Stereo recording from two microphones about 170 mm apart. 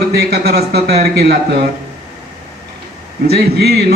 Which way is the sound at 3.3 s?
70° right (ahead or behind).